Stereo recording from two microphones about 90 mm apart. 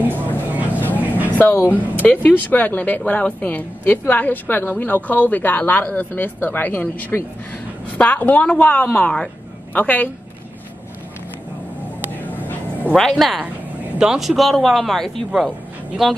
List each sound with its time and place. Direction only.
0.0 s vehicle: 20° right (ahead or behind)
0.7 s vehicle: 20° left (ahead or behind)
1.7 s a woman's voice: 20° left (ahead or behind)
12.1 s dog: 20° left (ahead or behind)
12.9 s speech: 5° left (ahead or behind)